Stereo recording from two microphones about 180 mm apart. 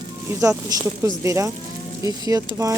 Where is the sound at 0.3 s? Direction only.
20° right (ahead or behind).